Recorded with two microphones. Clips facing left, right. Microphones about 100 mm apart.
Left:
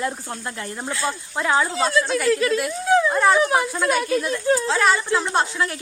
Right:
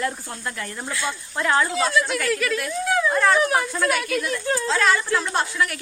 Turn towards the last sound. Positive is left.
turn(degrees=25)  # may be behind; listen again after turning